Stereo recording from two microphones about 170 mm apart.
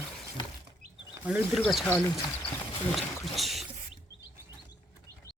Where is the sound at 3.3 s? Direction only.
Centre (ahead or behind).